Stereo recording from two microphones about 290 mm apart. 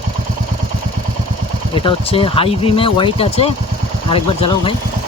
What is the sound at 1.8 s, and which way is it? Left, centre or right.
Speech, centre.